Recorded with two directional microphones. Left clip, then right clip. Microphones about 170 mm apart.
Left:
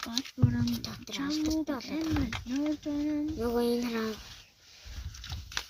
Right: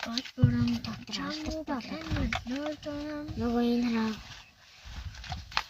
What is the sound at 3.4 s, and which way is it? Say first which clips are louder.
Child singing: right 2 dB; 20° left (ahead or behind).